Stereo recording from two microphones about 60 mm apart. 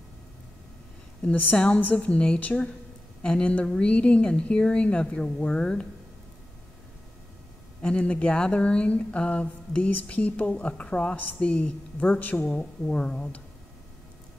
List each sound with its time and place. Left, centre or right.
1.3 s a woman's voice: left
7.8 s speech: centre
12.8 s a woman's voice: centre